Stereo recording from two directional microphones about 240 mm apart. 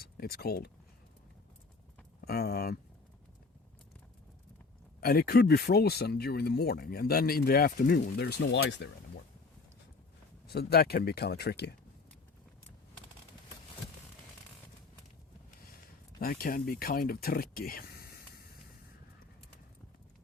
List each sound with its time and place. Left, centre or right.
0.0 s speech: left
2.2 s speech: left
4.9 s speech: left
10.4 s speech: left
16.2 s speech: left